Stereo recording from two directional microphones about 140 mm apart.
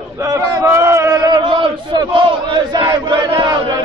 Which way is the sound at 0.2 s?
20° right (ahead or behind).